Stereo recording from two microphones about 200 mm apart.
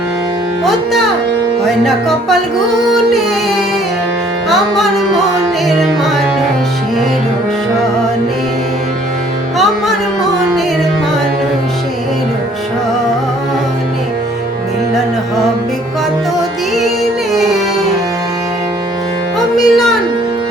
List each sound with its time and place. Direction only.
0.6 s music: centre (ahead or behind)
4.4 s music: centre (ahead or behind)
16.7 s music: centre (ahead or behind)
19.5 s music: centre (ahead or behind)